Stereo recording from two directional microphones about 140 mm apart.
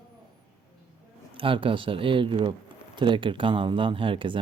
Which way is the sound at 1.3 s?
40° right (ahead or behind).